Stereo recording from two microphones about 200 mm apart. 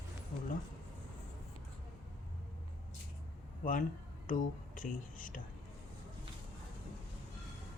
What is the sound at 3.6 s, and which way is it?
Speech, 40° left (ahead or behind).